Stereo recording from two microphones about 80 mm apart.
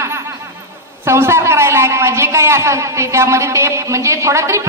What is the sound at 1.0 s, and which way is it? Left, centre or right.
A man's voice, right.